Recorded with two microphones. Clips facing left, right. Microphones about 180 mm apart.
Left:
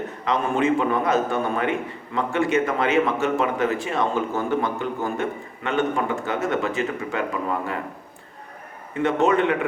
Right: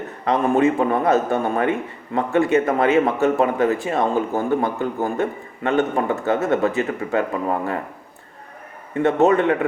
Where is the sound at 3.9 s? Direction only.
40° right (ahead or behind).